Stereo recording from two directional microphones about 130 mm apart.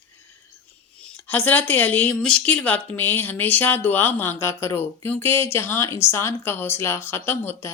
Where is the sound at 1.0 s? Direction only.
10° left (ahead or behind).